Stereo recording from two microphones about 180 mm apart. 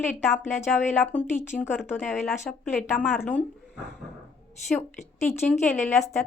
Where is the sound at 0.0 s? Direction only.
40° left (ahead or behind).